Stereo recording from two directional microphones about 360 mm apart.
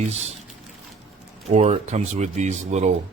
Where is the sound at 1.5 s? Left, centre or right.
Centre.